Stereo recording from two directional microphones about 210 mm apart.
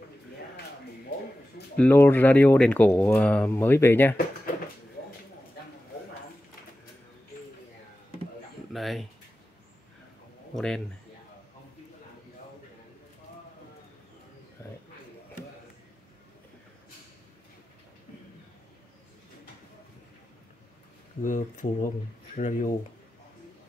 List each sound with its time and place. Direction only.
1.8 s speech: 10° left (ahead or behind)
8.7 s a sound: centre (ahead or behind)
10.5 s speech: 5° left (ahead or behind)
21.2 s speech: 35° left (ahead or behind)